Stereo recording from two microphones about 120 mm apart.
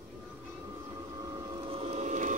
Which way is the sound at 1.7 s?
55° right (ahead or behind).